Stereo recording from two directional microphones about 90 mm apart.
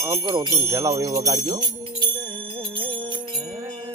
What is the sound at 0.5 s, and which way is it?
Jingle bell, 30° right (ahead or behind).